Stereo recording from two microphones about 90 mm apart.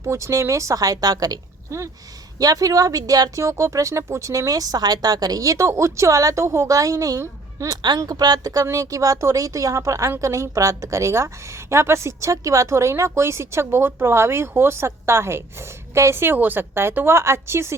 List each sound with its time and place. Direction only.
0.0 s speech: 30° right (ahead or behind)
1.7 s speech: 35° right (ahead or behind)